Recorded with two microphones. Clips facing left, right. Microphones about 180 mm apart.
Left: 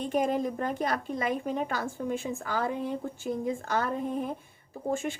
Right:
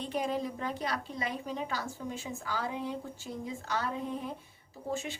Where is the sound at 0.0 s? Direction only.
50° left (ahead or behind).